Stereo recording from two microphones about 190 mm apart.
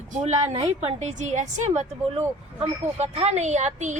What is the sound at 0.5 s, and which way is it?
Speech, 35° right (ahead or behind).